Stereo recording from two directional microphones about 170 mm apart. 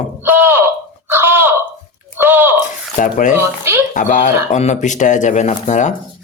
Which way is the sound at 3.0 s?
50° left (ahead or behind).